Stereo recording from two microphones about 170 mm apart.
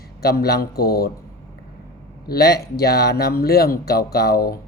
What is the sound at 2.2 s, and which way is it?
Speech, 65° left (ahead or behind).